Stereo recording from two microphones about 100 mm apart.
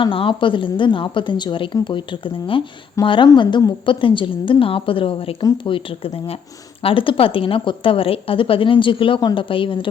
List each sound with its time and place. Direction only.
0.0 s a woman's voice: 60° left (ahead or behind)